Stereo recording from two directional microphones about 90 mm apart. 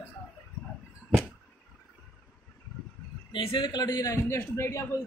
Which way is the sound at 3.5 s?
50° left (ahead or behind).